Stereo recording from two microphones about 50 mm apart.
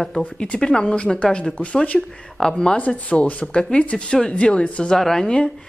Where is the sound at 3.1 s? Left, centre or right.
Left.